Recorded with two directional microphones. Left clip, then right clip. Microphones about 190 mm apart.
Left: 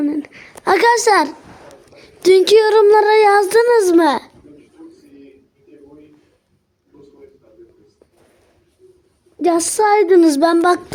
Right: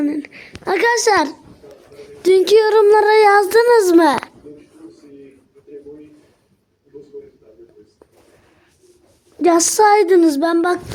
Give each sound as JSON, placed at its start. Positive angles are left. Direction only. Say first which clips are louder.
{"t": 0.0, "sound": "a sound", "louder": "left 1 dB", "side_deg": 5}
{"t": 0.3, "sound": "a child's voice", "louder": "left 5 dB", "side_deg": 20}
{"t": 2.0, "sound": "child singing", "louder": "left 2 dB", "side_deg": 5}
{"t": 9.4, "sound": "speech", "louder": "right 3 dB", "side_deg": -20}
{"t": 10.2, "sound": "speech", "louder": "left 2 dB", "side_deg": 15}